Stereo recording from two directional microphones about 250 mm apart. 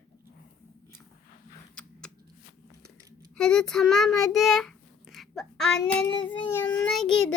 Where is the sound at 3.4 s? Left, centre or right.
Centre.